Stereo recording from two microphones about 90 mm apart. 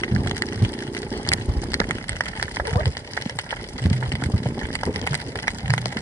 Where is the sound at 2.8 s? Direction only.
35° left (ahead or behind).